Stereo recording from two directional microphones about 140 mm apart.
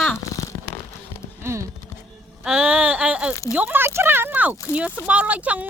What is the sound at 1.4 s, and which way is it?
Speech, 20° right (ahead or behind).